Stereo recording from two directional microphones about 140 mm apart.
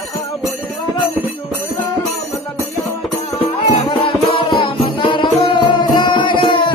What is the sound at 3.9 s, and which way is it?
Music, 40° left (ahead or behind).